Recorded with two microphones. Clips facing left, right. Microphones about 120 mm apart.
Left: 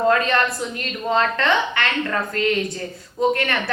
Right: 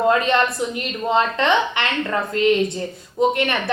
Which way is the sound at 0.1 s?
20° right (ahead or behind).